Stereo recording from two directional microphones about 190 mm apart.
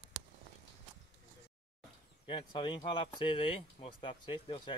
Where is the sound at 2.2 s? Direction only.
25° left (ahead or behind).